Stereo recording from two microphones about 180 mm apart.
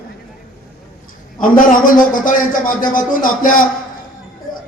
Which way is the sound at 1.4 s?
50° left (ahead or behind).